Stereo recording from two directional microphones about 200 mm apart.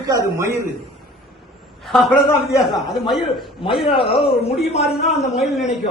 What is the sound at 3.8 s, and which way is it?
A man's voice, 25° left (ahead or behind).